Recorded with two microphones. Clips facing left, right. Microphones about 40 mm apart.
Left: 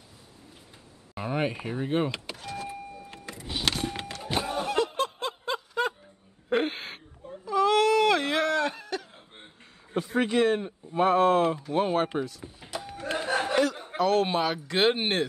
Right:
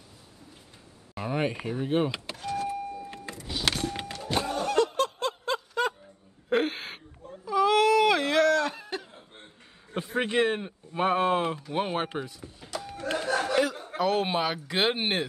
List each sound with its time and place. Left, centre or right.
1.1 s speech: centre
1.9 s vehicle: centre
3.3 s power windows: centre
3.9 s thunk: centre
4.3 s a sound: centre
7.4 s baby cry: centre
8.4 s a sound: centre
8.8 s chuckle: centre
9.9 s speech: right
12.4 s a sound: centre
13.3 s a sound: left
13.9 s speech: centre